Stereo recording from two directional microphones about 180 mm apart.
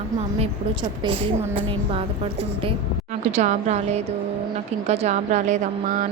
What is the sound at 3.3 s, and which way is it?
A woman's voice, 40° right (ahead or behind).